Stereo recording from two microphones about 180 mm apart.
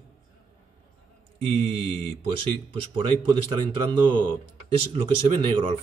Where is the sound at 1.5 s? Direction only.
30° right (ahead or behind).